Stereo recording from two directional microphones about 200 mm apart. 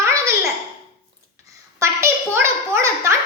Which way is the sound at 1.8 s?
15° right (ahead or behind).